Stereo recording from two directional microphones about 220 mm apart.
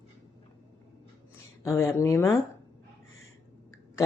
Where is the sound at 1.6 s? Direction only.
15° left (ahead or behind).